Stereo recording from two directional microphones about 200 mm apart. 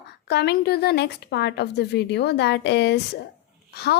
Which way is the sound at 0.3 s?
55° left (ahead or behind).